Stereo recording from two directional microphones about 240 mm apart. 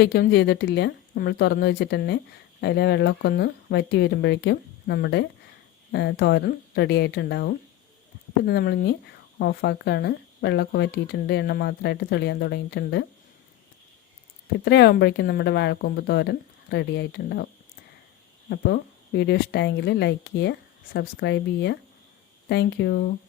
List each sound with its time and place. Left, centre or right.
0.0 s speech: left
14.6 s speech: left